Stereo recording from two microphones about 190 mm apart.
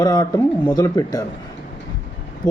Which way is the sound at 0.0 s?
20° left (ahead or behind).